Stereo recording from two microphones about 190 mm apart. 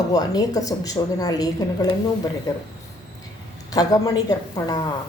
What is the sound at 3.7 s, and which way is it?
A woman's voice, 20° left (ahead or behind).